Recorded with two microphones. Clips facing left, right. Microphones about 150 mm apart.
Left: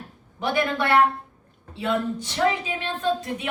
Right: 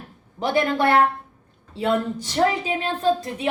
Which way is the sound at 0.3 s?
35° right (ahead or behind).